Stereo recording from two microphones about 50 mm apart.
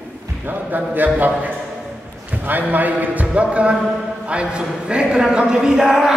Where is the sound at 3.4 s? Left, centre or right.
Right.